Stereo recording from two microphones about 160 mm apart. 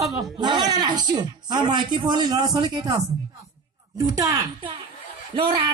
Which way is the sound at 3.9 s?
20° right (ahead or behind).